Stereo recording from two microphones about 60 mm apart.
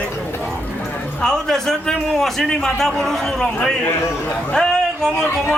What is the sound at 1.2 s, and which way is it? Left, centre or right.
A man's voice, centre.